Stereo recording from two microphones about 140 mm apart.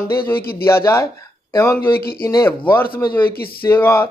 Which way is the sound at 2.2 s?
20° left (ahead or behind).